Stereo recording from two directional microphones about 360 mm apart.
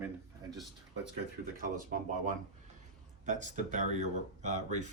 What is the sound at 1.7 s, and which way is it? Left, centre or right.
Speech, right.